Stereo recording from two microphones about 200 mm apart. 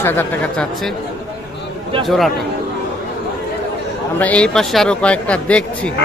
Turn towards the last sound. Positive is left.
turn(degrees=5)  # may be behind; listen again after turning